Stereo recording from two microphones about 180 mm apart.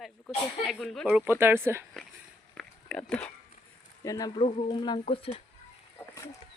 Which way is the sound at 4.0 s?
20° left (ahead or behind).